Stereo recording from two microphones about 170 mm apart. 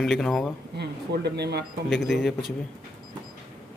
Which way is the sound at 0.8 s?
75° right (ahead or behind).